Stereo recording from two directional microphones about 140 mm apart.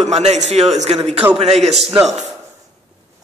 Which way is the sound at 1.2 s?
15° right (ahead or behind).